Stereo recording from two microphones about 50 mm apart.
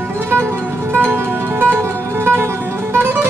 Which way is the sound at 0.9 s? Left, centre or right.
Right.